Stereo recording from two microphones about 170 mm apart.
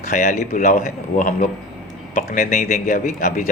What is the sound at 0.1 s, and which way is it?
Speech, 45° left (ahead or behind).